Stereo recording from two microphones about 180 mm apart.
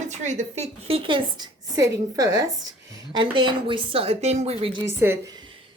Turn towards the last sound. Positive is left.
turn(degrees=-15)  # may be behind; listen again after turning